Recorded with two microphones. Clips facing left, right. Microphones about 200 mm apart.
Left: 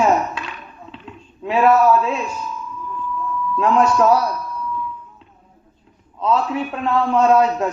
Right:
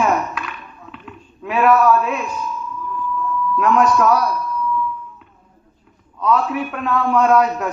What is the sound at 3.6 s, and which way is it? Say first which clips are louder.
Speech: even; 30° left (ahead or behind).